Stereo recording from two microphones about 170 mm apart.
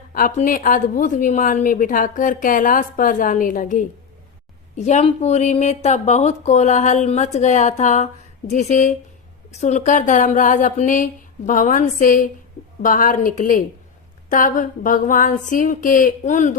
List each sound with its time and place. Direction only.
0.1 s a woman's voice: 50° left (ahead or behind)